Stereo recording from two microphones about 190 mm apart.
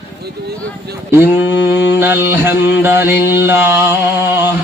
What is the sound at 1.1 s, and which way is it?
Speech, 10° right (ahead or behind).